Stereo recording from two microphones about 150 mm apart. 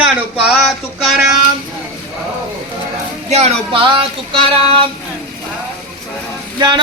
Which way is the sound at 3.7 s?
35° right (ahead or behind).